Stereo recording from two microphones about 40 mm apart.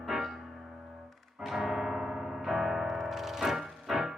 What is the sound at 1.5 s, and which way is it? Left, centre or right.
Music, centre.